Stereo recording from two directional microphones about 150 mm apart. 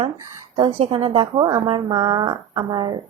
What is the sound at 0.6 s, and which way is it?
A woman's voice, 35° right (ahead or behind).